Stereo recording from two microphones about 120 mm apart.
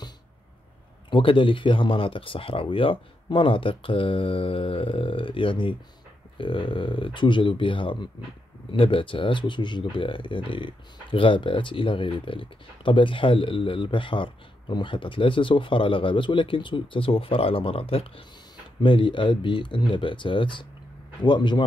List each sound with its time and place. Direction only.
1.1 s speech: 45° left (ahead or behind)